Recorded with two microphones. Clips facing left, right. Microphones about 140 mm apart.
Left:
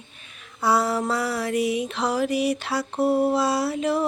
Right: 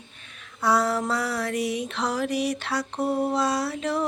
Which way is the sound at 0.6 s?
5° left (ahead or behind).